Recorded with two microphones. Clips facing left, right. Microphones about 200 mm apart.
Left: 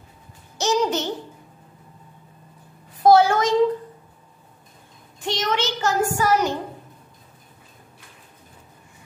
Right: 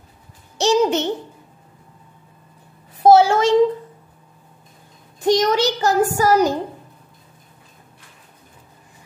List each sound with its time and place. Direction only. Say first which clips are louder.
0.6 s a child's voice: right 5 dB; 30° right (ahead or behind)
3.0 s a sound: right 3 dB; 25° right (ahead or behind)
5.2 s a child's voice: right 8 dB; 40° right (ahead or behind)